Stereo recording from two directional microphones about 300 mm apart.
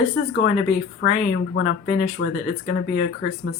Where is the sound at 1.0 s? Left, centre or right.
Left.